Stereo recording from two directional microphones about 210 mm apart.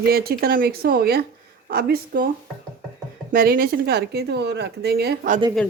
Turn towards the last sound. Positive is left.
turn(degrees=-45)  # may be behind; listen again after turning